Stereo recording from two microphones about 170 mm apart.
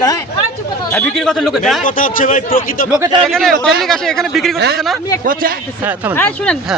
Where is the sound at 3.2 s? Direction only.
Centre (ahead or behind).